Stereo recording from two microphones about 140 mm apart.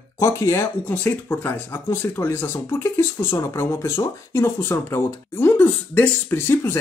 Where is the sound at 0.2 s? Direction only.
20° left (ahead or behind).